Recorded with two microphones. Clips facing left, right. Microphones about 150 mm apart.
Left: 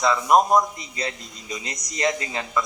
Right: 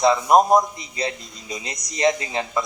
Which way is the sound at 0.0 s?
30° right (ahead or behind).